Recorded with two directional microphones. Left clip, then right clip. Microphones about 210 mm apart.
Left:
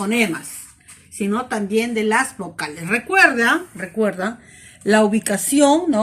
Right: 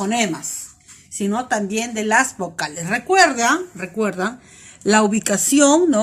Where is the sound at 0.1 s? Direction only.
55° right (ahead or behind).